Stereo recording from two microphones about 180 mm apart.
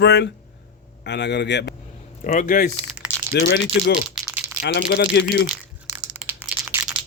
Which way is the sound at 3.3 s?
75° left (ahead or behind).